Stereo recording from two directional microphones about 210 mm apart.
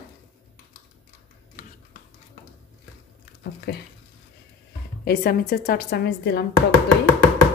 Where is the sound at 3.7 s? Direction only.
50° left (ahead or behind).